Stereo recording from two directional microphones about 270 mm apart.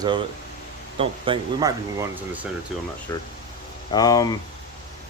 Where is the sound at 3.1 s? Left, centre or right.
Centre.